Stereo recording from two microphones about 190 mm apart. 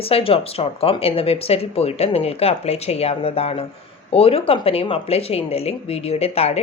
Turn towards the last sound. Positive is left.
turn(degrees=30)  # may be behind; listen again after turning